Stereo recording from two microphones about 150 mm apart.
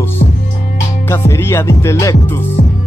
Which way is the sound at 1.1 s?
15° left (ahead or behind).